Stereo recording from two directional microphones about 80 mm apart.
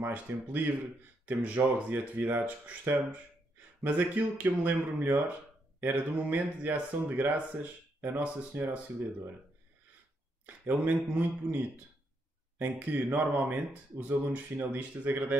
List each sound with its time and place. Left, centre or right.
0.0 s speech: right
10.4 s speech: right